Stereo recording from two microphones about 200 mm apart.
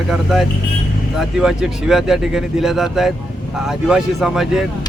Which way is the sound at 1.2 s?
5° right (ahead or behind).